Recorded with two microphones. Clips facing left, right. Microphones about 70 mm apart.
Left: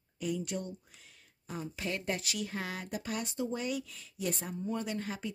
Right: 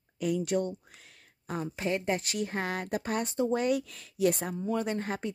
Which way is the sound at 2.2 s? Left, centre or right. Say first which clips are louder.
Right 5 dB; right.